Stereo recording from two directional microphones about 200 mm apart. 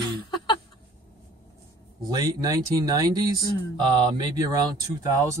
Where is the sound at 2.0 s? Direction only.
20° right (ahead or behind).